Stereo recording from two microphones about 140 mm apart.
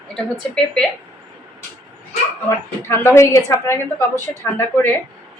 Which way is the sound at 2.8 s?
15° left (ahead or behind).